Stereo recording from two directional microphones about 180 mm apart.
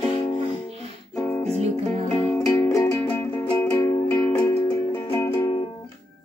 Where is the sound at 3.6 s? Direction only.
10° left (ahead or behind).